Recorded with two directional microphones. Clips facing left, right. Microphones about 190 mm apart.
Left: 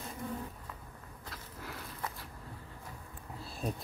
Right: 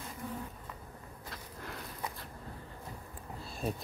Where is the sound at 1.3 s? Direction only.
5° left (ahead or behind).